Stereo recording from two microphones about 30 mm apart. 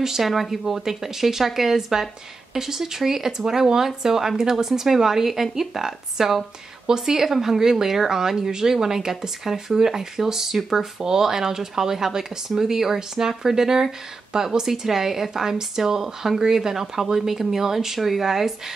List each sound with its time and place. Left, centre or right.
0.0 s speech: centre
0.3 s speech: centre